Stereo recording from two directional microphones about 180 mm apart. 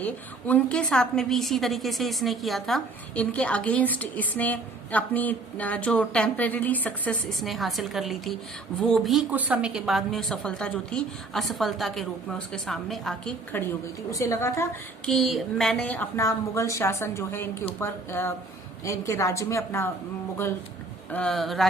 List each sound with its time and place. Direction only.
0.0 s a woman's voice: 10° left (ahead or behind)
14.1 s a woman's voice: 15° left (ahead or behind)
15.0 s a woman's voice: centre (ahead or behind)
21.1 s a woman's voice: 5° left (ahead or behind)